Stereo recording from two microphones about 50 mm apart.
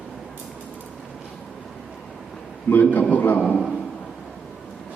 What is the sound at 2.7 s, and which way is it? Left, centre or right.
Speech, left.